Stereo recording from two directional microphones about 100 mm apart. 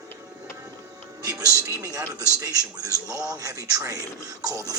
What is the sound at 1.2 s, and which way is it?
Speech, 35° right (ahead or behind).